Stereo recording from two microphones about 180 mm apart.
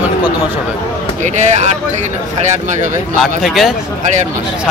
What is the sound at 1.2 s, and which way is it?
Speech, 40° right (ahead or behind).